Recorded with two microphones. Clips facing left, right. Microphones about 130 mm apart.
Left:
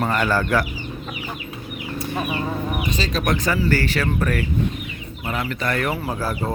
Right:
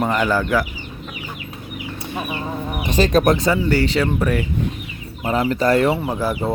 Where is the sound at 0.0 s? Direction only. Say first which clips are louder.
Right 2 dB; 15° right (ahead or behind).